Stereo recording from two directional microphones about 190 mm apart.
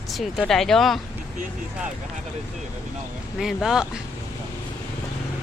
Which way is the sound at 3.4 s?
Centre (ahead or behind).